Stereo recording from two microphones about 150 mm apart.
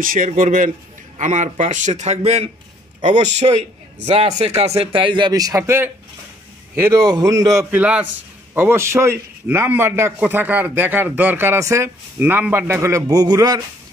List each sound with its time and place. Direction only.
0.0 s a man's voice: 65° right (ahead or behind); by 7.6 s 20° right (ahead or behind)
7.7 s a man's voice: 10° right (ahead or behind); by 13.6 s 25° right (ahead or behind)